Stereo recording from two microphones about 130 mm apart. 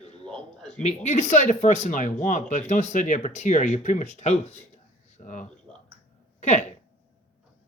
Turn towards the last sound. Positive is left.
turn(degrees=60)  # may be behind; listen again after turning